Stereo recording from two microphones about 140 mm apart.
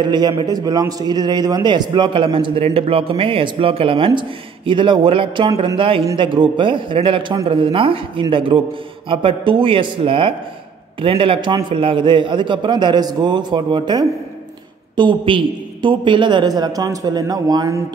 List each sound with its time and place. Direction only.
0.0 s a man's voice: 30° right (ahead or behind)